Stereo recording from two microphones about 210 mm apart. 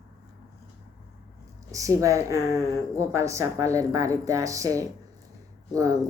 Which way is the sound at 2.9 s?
15° right (ahead or behind).